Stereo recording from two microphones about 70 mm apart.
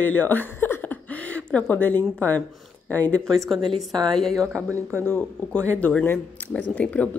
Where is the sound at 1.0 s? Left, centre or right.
Left.